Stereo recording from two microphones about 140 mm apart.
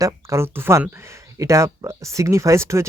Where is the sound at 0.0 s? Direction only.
20° right (ahead or behind).